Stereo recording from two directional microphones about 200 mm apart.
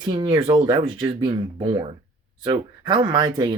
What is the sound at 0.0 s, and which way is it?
Speech, 25° right (ahead or behind).